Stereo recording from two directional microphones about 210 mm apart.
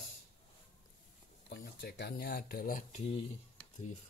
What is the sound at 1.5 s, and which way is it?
Speech, 50° left (ahead or behind).